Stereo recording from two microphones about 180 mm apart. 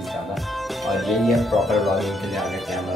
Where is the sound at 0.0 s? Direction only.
Centre (ahead or behind).